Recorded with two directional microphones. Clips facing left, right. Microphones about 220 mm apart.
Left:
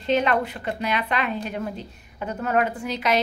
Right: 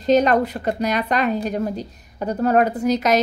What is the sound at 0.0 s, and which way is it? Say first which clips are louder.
A woman's voice: right 6 dB; 40° right (ahead or behind).